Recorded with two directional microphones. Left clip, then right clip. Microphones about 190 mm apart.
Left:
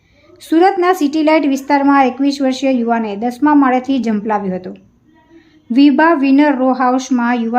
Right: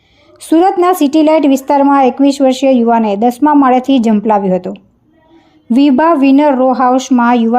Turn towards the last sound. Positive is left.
turn(degrees=-30)  # may be behind; listen again after turning